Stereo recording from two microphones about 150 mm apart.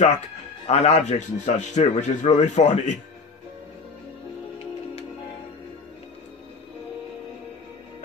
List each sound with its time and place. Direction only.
0.7 s a man's voice: 45° left (ahead or behind)